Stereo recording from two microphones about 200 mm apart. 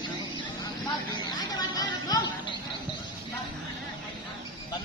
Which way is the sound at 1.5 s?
20° left (ahead or behind).